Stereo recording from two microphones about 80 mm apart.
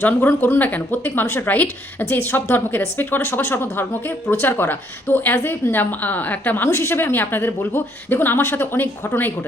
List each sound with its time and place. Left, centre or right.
0.0 s a woman's voice: left